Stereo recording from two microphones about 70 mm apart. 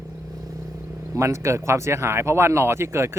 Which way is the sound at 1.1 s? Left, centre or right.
Right.